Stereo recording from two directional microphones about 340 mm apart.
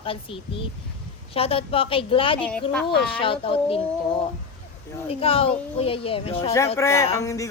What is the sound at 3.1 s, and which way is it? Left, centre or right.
Speech, centre.